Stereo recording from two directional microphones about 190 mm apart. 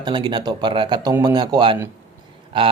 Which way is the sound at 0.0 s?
25° right (ahead or behind).